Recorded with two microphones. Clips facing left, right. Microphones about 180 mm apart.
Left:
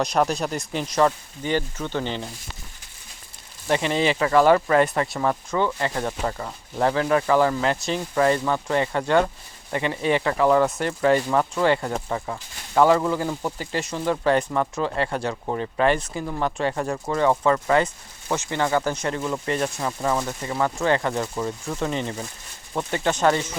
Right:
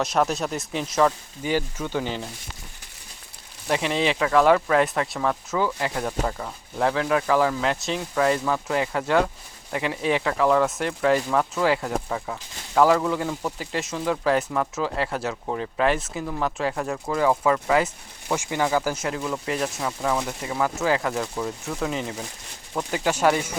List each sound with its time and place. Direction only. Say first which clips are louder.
0.0 s speech: left 1 dB; centre (ahead or behind)
3.7 s speech: left 2 dB; centre (ahead or behind)
23.0 s speech: even; 10° right (ahead or behind)